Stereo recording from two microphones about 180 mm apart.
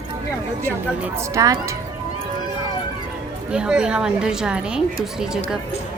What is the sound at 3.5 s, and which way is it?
A woman's voice, 5° right (ahead or behind).